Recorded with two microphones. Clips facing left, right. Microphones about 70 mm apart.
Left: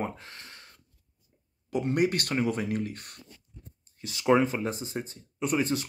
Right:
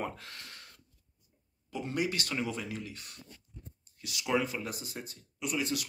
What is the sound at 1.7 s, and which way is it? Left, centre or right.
Speech, left.